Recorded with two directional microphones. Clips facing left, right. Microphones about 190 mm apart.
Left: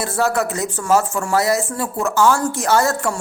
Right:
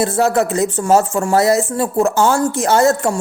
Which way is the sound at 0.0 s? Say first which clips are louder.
Right 5 dB; 25° right (ahead or behind).